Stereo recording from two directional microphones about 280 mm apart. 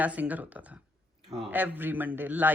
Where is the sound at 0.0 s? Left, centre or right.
Centre.